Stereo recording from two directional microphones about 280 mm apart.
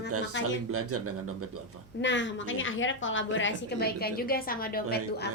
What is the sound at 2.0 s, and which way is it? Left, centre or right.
A woman's voice, left.